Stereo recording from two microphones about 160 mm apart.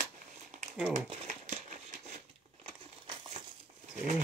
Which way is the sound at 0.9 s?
50° right (ahead or behind).